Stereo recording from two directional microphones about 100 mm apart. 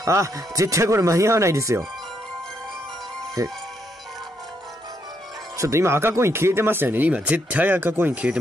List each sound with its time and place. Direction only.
0.0 s speech: 30° right (ahead or behind)
3.4 s speech: 35° right (ahead or behind)
5.6 s speech: 30° right (ahead or behind)